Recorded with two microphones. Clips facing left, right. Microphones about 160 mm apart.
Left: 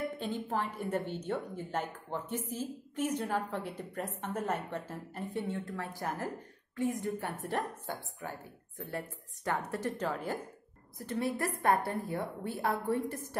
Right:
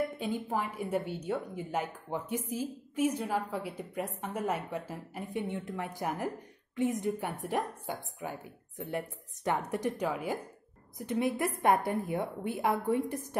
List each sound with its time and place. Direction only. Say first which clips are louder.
0.2 s a woman's voice: right 2 dB; 10° right (ahead or behind)